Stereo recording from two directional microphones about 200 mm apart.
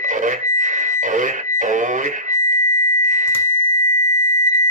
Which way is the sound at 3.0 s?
40° right (ahead or behind).